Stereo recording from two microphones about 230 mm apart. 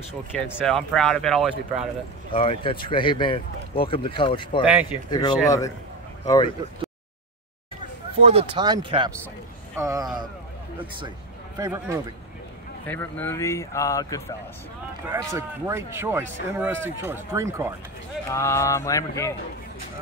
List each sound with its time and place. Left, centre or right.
0.3 s speech: centre
2.3 s speech: left
8.2 s speech: right
11.5 s speech: centre
12.8 s speech: centre
15.0 s speech: centre
18.3 s speech: centre